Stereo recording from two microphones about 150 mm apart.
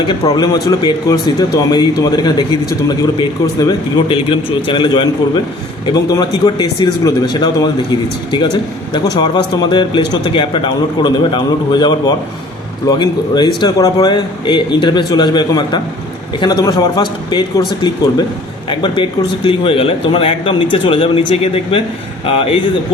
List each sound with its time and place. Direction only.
0.1 s speech: 25° left (ahead or behind)
4.1 s speech: 35° left (ahead or behind)
8.9 s speech: 30° left (ahead or behind)